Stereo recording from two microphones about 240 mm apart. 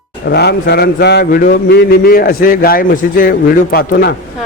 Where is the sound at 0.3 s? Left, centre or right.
Left.